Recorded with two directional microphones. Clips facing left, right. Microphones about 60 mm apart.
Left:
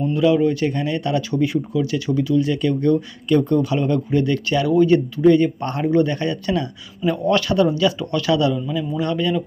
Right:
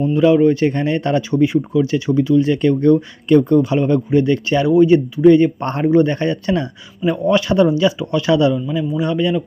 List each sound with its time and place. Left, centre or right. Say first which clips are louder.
0.1 s speech: right 4 dB; right
7.0 s speech: right 3 dB; centre
8.5 s a man's voice: right 3 dB; centre